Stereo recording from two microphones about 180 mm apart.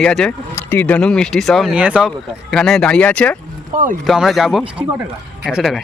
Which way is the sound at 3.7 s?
45° right (ahead or behind).